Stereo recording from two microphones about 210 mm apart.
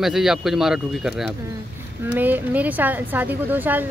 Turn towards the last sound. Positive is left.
turn(degrees=-10)  # may be behind; listen again after turning